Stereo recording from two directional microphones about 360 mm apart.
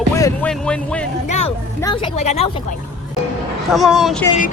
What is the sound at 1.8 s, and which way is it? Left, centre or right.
Speech, centre.